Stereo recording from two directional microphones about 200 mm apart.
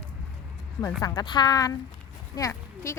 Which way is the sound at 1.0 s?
20° left (ahead or behind).